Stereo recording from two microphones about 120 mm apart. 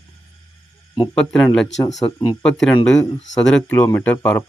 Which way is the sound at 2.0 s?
20° left (ahead or behind).